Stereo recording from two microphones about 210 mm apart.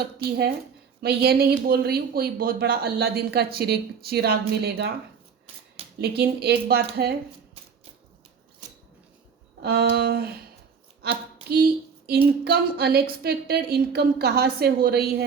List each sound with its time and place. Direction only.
1.0 s speech: 50° right (ahead or behind)
6.0 s speech: 50° right (ahead or behind)
9.6 s speech: 50° right (ahead or behind)
11.4 s speech: 45° right (ahead or behind)